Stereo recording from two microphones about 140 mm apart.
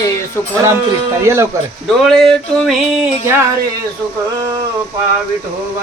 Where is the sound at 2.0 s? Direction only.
5° left (ahead or behind).